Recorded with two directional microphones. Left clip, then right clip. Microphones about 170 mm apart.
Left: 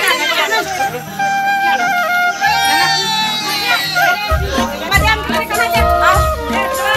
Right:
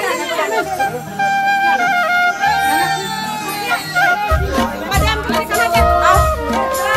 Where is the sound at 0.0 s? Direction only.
65° right (ahead or behind).